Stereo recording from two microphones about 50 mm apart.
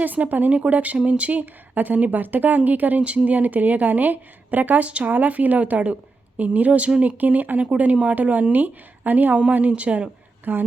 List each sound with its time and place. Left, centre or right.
0.0 s a woman's voice: right
10.5 s speech: right